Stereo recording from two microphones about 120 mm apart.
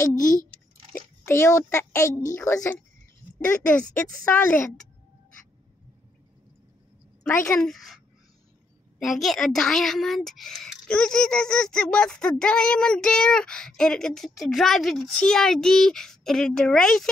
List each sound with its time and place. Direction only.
1.2 s a child's voice: 20° left (ahead or behind)
3.4 s speech: 10° left (ahead or behind)
7.3 s a child's voice: 20° left (ahead or behind)
7.6 s a woman's voice: centre (ahead or behind)
9.0 s a woman's voice: centre (ahead or behind)